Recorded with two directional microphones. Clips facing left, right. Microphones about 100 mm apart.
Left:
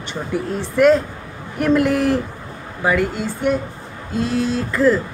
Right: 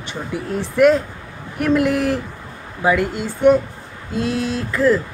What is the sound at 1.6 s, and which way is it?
Speech, 10° right (ahead or behind).